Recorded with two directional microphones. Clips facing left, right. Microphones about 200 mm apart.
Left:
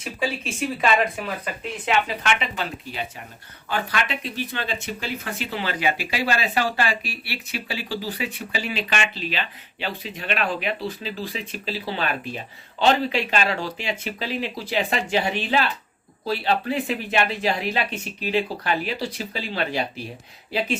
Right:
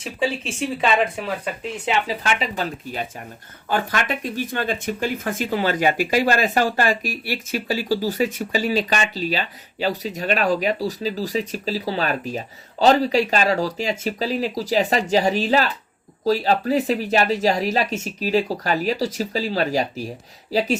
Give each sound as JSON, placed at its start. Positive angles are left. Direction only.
{"t": 0.0, "sound": "speech", "side_deg": -30}
{"t": 1.8, "sound": "speech", "side_deg": -35}